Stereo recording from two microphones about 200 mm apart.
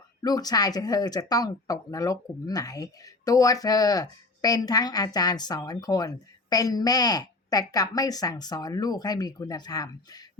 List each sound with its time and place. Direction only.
0.2 s speech: 20° left (ahead or behind)